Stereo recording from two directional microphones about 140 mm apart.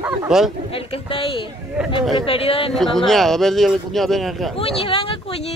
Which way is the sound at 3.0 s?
Centre (ahead or behind).